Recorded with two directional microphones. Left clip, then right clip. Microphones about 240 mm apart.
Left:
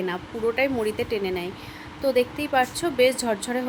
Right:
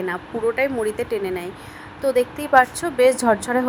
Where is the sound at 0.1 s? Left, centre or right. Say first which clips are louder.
Right 3 dB; centre.